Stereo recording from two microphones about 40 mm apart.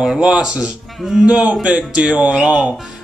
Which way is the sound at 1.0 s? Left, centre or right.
Centre.